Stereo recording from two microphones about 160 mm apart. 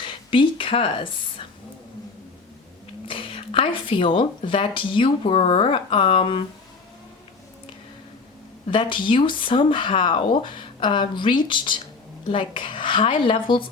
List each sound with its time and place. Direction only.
0.0 s a woman's voice: 35° left (ahead or behind)
3.1 s speech: 35° left (ahead or behind)
8.7 s speech: 30° left (ahead or behind)